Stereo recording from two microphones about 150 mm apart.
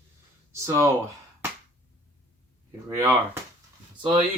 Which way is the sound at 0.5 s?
20° right (ahead or behind).